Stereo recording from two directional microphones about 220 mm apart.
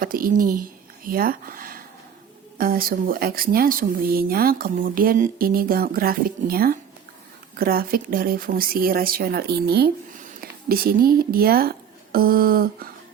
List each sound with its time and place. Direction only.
0.0 s speech: 40° right (ahead or behind)